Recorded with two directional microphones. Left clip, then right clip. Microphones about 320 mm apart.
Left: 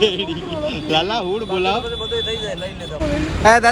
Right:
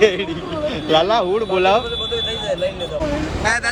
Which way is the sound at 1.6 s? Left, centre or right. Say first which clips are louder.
Right 5 dB; left.